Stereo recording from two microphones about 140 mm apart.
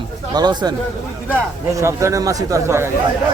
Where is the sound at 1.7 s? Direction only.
20° right (ahead or behind).